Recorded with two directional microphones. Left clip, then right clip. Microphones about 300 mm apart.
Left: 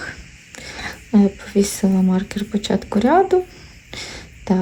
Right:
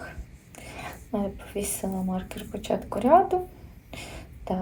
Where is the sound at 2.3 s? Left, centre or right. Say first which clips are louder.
Left 7 dB; left.